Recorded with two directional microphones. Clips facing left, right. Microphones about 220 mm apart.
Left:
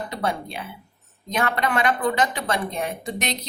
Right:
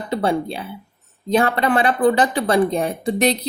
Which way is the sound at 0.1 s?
30° right (ahead or behind).